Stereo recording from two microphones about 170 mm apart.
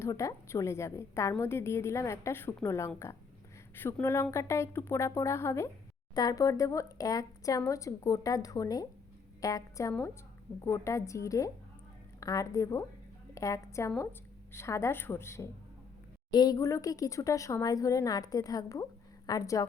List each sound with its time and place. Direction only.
0.0 s a woman's voice: 20° left (ahead or behind)